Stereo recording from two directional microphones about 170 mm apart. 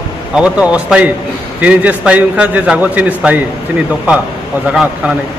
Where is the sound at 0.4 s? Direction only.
5° right (ahead or behind).